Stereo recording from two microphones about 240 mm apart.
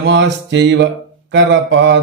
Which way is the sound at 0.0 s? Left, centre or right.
Right.